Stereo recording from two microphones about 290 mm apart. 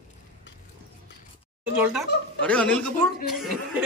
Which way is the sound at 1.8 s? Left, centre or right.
Centre.